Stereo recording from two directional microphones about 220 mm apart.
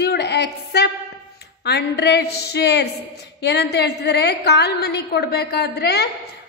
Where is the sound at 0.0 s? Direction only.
50° left (ahead or behind).